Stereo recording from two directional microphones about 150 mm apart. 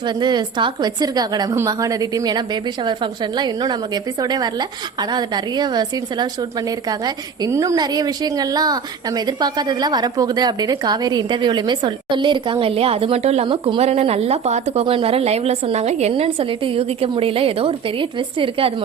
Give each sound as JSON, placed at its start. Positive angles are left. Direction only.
{"t": 0.0, "sound": "a woman's voice", "side_deg": -30}